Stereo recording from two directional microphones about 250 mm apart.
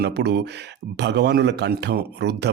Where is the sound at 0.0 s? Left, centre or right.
Right.